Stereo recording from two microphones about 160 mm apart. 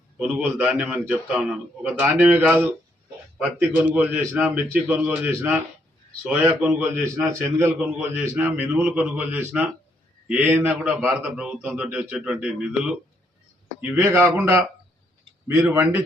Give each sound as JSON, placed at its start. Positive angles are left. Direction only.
{"t": 0.2, "sound": "a man's voice", "side_deg": -5}
{"t": 15.7, "sound": "a man's voice", "side_deg": -15}